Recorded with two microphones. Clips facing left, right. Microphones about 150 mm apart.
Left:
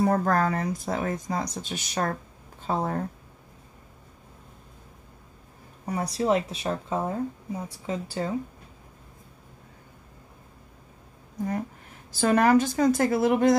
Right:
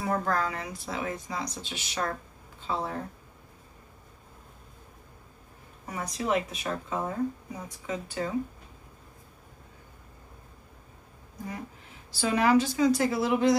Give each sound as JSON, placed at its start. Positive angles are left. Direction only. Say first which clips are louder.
{"t": 0.0, "sound": "speech", "louder": "left 6 dB", "side_deg": 45}
{"t": 5.9, "sound": "speech", "louder": "left 5 dB", "side_deg": 35}
{"t": 12.1, "sound": "speech", "louder": "left 4 dB", "side_deg": 50}